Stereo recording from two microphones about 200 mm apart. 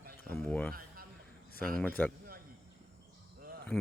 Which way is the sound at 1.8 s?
10° left (ahead or behind).